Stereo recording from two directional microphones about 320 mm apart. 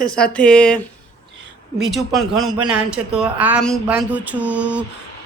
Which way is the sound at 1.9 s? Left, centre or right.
Centre.